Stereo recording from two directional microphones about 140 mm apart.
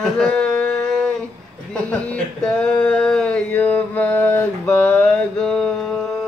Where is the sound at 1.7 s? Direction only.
10° left (ahead or behind).